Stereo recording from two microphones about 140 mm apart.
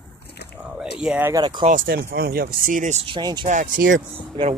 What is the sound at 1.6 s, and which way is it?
Speech, 80° right.